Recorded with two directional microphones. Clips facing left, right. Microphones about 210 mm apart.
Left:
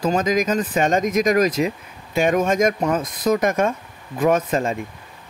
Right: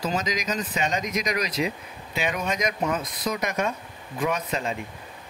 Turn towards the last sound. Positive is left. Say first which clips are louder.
# left 8 dB
turn(degrees=50)  # may be behind; listen again after turning